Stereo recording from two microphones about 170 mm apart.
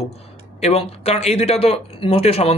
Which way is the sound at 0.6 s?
35° left (ahead or behind).